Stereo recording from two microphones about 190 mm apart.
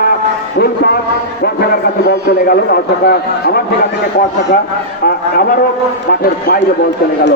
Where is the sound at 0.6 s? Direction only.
55° left (ahead or behind).